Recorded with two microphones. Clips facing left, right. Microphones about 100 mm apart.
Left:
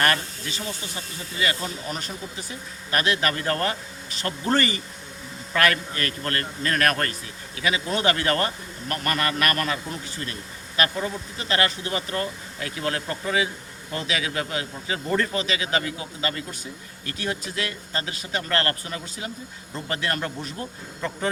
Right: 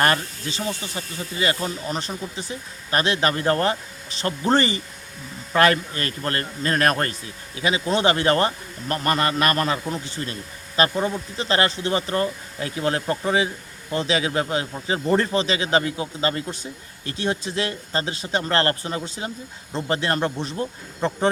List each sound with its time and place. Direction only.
0.0 s speech: 25° right (ahead or behind)